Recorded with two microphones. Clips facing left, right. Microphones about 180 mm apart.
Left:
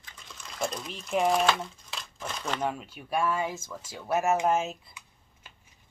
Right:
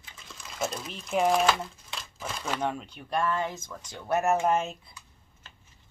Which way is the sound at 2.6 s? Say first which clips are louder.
Even; 5° left (ahead or behind).